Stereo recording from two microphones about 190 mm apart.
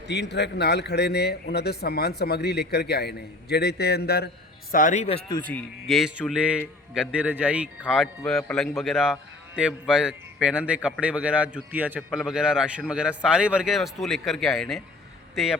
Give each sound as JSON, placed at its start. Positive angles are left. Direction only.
{"t": 0.1, "sound": "a man's voice", "side_deg": 65}
{"t": 4.7, "sound": "speech", "side_deg": 45}
{"t": 5.4, "sound": "a man's voice", "side_deg": 5}